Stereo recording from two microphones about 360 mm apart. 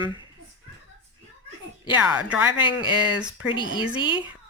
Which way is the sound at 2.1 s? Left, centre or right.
Centre.